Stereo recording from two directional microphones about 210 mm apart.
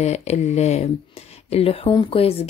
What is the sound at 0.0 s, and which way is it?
Speech, 30° left (ahead or behind).